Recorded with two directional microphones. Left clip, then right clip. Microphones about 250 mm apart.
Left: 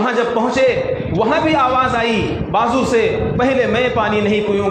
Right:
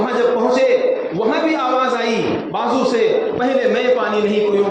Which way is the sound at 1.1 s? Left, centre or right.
Left.